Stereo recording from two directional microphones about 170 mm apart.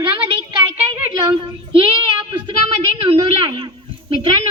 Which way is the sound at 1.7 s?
30° right (ahead or behind).